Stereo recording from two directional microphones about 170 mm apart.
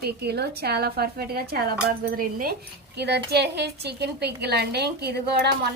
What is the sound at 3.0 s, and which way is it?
Speech, 75° right (ahead or behind).